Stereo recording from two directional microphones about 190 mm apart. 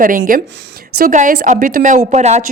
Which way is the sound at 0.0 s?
45° right (ahead or behind).